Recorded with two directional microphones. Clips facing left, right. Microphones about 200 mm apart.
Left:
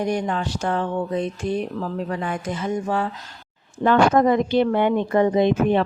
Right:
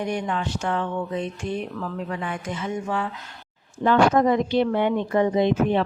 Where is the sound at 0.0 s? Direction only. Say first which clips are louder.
Left 3 dB; 40° left (ahead or behind).